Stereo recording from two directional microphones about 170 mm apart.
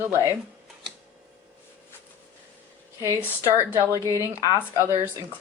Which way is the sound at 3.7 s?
15° right (ahead or behind).